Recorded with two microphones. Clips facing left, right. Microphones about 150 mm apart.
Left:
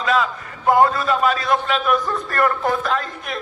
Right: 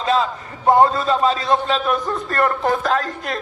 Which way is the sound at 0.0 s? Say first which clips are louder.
Right 1 dB; 30° right (ahead or behind).